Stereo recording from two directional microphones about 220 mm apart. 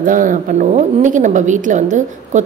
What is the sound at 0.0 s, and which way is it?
A woman's voice, 35° right (ahead or behind).